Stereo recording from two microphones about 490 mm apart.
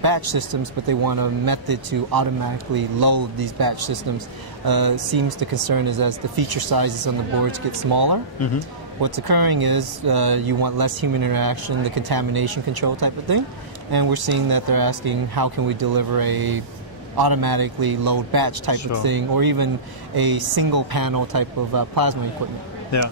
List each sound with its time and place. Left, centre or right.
0.0 s speech: right
22.9 s speech: left